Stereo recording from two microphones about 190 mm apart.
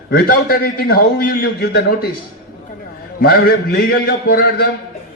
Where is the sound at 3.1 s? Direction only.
55° left (ahead or behind).